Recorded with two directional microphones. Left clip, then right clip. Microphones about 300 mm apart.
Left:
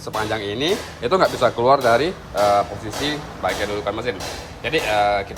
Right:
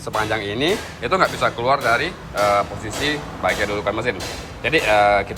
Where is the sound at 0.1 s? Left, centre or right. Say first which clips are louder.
Right 2 dB; centre.